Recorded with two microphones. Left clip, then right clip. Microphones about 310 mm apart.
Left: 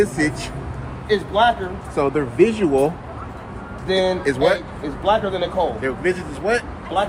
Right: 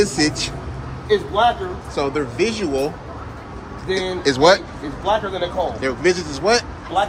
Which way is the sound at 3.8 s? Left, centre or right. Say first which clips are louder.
Left 2 dB; centre.